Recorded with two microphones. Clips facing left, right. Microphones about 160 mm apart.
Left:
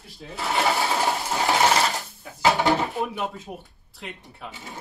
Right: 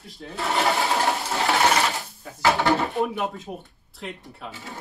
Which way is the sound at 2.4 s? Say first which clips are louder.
Even; 20° left (ahead or behind).